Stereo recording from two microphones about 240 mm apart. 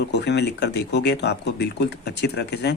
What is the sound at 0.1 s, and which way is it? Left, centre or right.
Speech, left.